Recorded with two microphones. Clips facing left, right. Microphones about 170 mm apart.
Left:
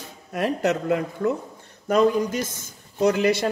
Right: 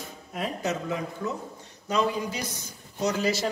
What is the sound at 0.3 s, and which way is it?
A man's voice, 70° left (ahead or behind).